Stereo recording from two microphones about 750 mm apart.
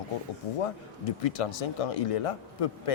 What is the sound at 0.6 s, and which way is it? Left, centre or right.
Speech, left.